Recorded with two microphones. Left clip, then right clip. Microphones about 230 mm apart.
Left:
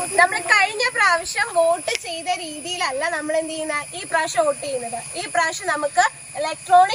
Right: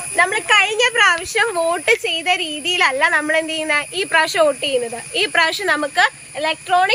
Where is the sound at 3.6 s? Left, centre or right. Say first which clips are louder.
Right 7 dB; right.